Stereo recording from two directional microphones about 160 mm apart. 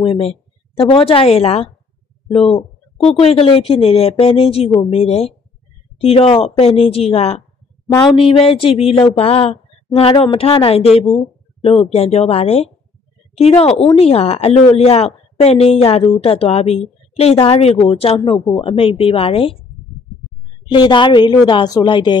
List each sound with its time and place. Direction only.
0.0 s a woman's voice: 35° left (ahead or behind)
20.7 s a woman's voice: 30° left (ahead or behind)